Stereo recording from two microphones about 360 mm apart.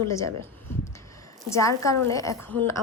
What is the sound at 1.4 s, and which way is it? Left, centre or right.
A woman's voice, centre.